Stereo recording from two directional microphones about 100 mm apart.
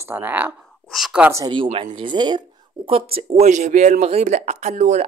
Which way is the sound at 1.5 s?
60° right (ahead or behind).